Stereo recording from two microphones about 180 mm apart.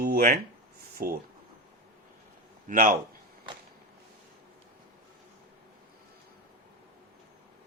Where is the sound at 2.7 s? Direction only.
50° right (ahead or behind).